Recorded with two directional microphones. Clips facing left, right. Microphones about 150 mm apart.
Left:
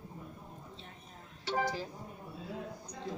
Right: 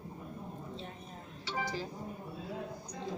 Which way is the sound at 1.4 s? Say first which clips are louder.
Left 4 dB; 50° left (ahead or behind).